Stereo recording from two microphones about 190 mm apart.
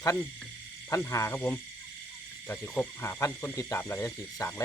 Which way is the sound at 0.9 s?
15° left (ahead or behind).